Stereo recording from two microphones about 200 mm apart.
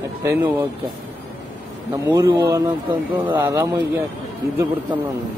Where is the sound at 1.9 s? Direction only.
15° right (ahead or behind).